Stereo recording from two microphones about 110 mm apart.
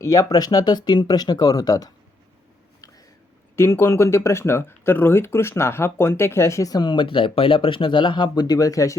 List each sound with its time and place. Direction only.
0.0 s speech: 30° left (ahead or behind)
3.5 s speech: 20° left (ahead or behind)